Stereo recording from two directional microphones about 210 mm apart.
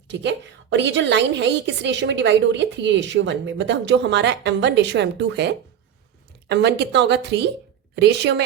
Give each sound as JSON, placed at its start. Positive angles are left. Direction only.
{"t": 0.1, "sound": "a woman's voice", "side_deg": -55}